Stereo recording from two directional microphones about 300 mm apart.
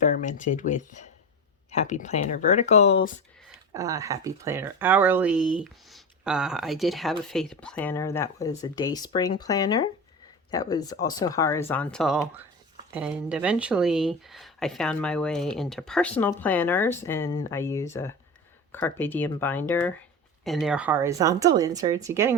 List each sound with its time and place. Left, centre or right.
0.0 s speech: left
3.7 s speech: centre